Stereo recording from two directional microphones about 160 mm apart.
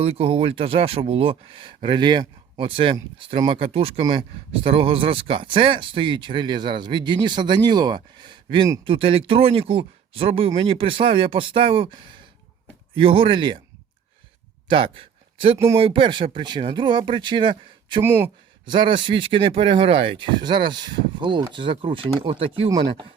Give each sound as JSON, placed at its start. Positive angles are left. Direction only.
{"t": 0.0, "sound": "speech", "side_deg": -40}
{"t": 14.9, "sound": "a sound", "side_deg": -35}
{"t": 15.5, "sound": "speech", "side_deg": -20}
{"t": 15.8, "sound": "speech", "side_deg": -30}
{"t": 18.0, "sound": "speech", "side_deg": -15}
{"t": 18.6, "sound": "speech", "side_deg": -30}